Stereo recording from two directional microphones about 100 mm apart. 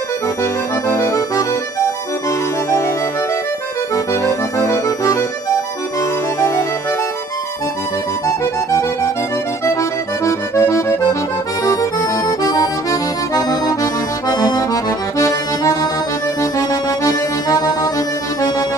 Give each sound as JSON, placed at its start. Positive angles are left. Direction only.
{"t": 0.8, "sound": "accordion", "side_deg": 20}
{"t": 3.9, "sound": "accordion", "side_deg": 35}
{"t": 8.3, "sound": "music", "side_deg": 30}
{"t": 9.7, "sound": "accordion", "side_deg": 30}